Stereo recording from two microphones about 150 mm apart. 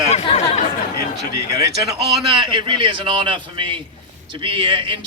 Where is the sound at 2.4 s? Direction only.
30° right (ahead or behind).